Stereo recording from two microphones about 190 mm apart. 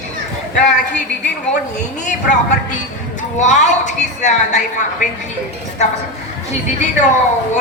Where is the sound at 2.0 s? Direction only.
40° left (ahead or behind).